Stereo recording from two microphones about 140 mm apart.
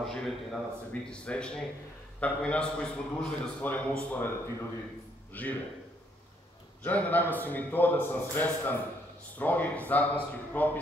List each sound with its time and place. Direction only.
0.0 s a man's voice: 5° left (ahead or behind)
6.8 s a man's voice: 10° left (ahead or behind)